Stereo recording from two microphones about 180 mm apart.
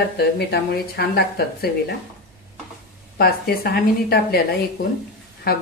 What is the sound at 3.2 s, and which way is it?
Speech, 60° left (ahead or behind).